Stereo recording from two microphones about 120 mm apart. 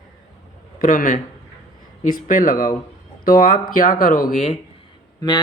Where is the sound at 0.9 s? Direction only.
90° left.